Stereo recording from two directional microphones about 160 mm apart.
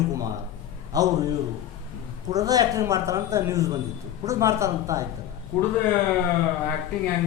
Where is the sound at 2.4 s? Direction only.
25° right (ahead or behind).